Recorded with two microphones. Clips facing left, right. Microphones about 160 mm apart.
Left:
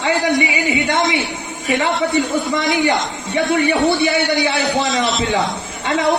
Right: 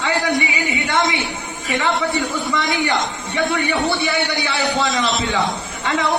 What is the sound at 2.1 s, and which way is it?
A man's voice, 20° left (ahead or behind).